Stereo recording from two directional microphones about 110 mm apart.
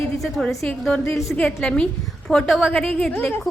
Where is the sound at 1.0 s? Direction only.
25° left (ahead or behind).